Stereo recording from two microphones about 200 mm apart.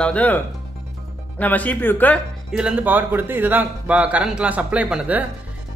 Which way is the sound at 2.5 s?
5° right (ahead or behind).